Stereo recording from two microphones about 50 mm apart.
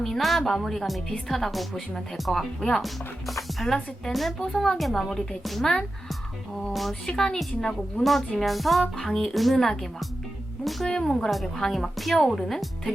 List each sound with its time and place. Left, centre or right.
0.0 s speech: centre
2.6 s a woman's voice: centre
2.8 s a woman's voice: centre
6.7 s speech: centre
7.1 s a woman's voice: centre
8.4 s speech: centre
10.8 s a woman's voice: centre